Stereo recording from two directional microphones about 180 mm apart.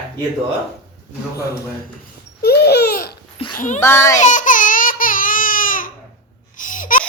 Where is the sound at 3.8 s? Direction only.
15° left (ahead or behind).